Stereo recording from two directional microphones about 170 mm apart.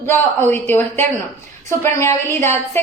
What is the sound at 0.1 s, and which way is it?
A woman's voice, 15° left (ahead or behind).